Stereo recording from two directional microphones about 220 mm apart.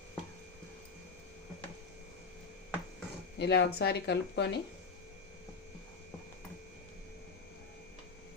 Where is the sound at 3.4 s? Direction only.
50° left (ahead or behind).